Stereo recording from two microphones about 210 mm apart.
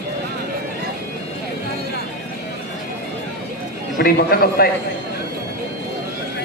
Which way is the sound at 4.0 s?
45° left (ahead or behind).